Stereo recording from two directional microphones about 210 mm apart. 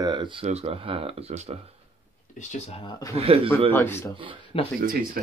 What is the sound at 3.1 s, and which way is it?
Speech, 25° right (ahead or behind).